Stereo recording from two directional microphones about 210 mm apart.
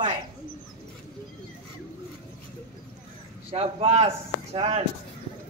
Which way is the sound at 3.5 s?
30° right (ahead or behind).